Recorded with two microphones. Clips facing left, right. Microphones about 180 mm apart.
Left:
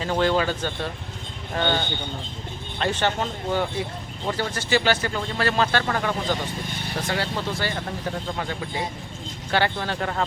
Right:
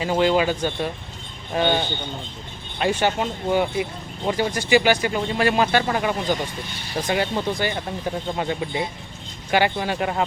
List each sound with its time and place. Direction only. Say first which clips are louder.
0.0 s speech: right 3 dB; 10° right (ahead or behind)